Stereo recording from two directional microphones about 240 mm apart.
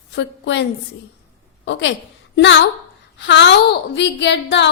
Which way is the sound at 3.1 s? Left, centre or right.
Left.